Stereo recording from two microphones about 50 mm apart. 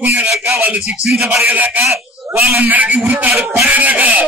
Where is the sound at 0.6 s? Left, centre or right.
Right.